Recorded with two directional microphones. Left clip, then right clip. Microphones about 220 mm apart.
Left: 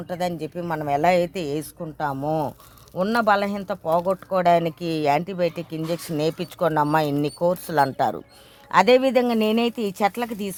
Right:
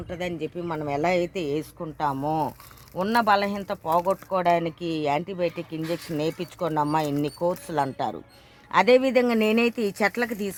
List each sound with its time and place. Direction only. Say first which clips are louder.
0.1 s speech: left 4 dB; 35° left (ahead or behind)
8.7 s speech: left 2 dB; 20° left (ahead or behind)